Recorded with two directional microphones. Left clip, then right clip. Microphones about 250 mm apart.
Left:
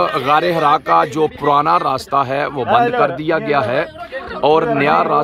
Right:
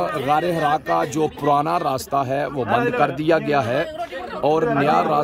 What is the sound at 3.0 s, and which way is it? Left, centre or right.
Speech, centre.